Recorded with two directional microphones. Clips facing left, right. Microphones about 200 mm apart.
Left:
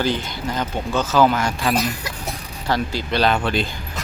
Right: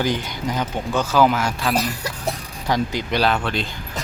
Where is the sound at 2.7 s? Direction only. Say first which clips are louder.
Right 1 dB; 15° right (ahead or behind).